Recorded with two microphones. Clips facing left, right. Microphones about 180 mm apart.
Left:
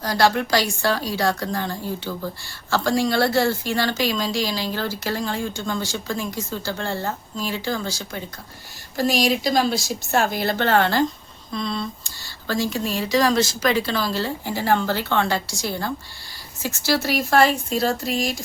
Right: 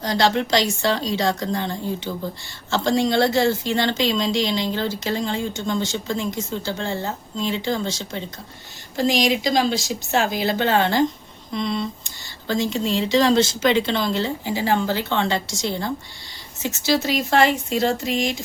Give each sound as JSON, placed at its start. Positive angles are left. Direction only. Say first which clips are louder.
{"t": 0.0, "sound": "a woman's voice", "louder": "even", "side_deg": -20}